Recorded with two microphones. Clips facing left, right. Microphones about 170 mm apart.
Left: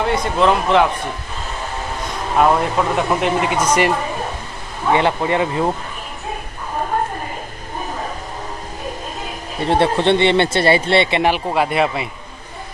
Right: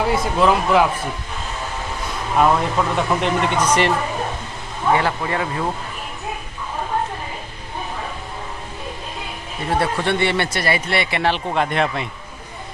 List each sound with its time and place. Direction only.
0.0 s speech: 5° right (ahead or behind)
2.3 s speech: centre (ahead or behind)
4.9 s speech: 20° left (ahead or behind)
9.6 s speech: 25° left (ahead or behind)
11.3 s speech: 5° left (ahead or behind)